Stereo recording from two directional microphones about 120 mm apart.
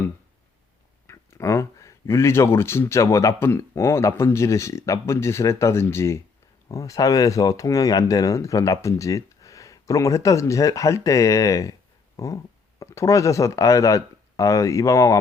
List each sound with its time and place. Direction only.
1.0 s speech: 25° left (ahead or behind)